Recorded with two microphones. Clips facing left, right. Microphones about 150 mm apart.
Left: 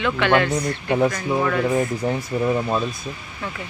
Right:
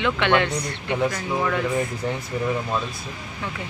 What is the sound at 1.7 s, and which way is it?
Speech, 35° left (ahead or behind).